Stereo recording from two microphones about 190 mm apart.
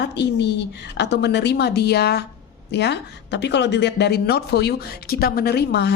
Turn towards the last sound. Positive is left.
turn(degrees=60)  # may be behind; listen again after turning